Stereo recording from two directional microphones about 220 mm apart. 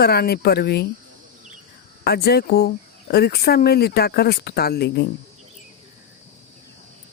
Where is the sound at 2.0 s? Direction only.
45° left (ahead or behind).